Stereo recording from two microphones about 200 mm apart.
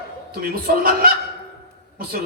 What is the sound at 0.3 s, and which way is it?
A man's voice, 50° right (ahead or behind).